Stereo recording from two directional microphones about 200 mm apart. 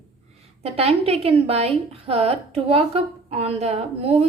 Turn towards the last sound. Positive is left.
turn(degrees=-30)  # may be behind; listen again after turning